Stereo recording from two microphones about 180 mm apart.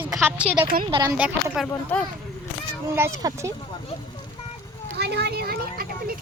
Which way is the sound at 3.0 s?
15° right (ahead or behind).